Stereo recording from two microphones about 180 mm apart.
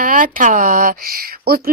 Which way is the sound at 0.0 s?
50° right (ahead or behind).